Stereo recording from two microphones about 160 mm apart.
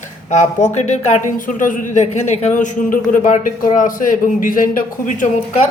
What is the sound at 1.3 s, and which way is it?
A man's voice, 55° left (ahead or behind).